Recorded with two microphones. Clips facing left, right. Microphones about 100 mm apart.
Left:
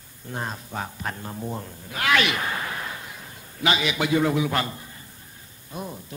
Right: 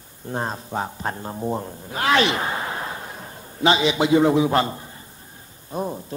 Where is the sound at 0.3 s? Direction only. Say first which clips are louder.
Right 5 dB; 30° right (ahead or behind).